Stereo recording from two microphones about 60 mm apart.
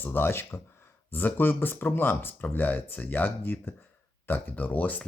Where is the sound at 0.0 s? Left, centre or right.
Left.